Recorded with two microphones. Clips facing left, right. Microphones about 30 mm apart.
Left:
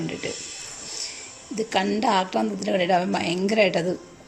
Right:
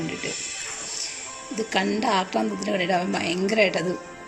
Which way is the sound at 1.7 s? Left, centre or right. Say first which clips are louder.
Left 1 dB; centre.